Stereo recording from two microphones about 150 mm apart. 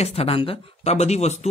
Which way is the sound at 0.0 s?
40° left (ahead or behind).